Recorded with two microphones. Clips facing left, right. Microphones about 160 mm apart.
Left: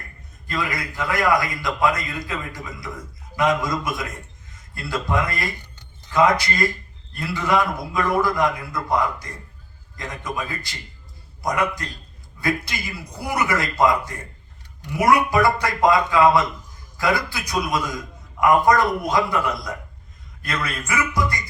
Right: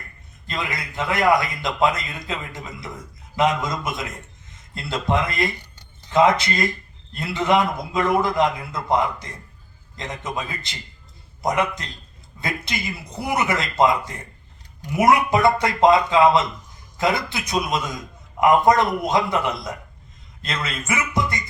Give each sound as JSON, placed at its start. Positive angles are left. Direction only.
{"t": 0.4, "sound": "a man's voice", "side_deg": -25}